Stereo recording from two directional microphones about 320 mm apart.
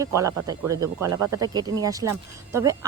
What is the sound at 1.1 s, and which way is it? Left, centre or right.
Speech, right.